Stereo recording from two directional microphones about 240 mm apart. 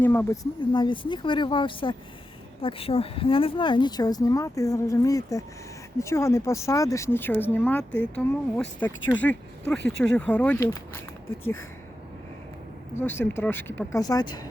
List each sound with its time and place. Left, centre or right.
0.0 s speech: centre
0.7 s speech: centre
9.7 s speech: left
10.2 s speech: centre
13.0 s speech: centre